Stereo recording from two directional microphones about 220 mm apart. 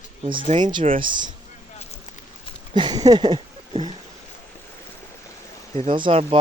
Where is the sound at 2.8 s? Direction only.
20° right (ahead or behind).